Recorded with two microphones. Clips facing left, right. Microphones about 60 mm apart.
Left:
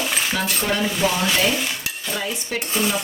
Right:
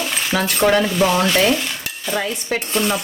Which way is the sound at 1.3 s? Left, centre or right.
Centre.